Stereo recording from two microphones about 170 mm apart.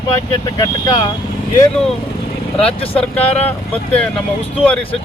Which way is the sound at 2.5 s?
35° left (ahead or behind).